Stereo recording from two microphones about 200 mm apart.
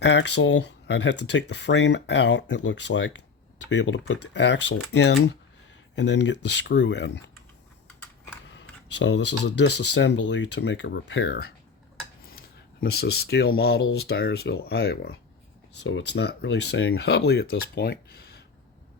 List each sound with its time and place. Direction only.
0.0 s speech: 60° left (ahead or behind)
8.5 s speech: 65° left (ahead or behind)
15.8 s speech: 65° left (ahead or behind)